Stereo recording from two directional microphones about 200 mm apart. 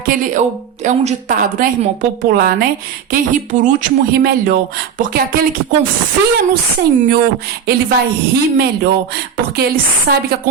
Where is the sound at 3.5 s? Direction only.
40° right (ahead or behind).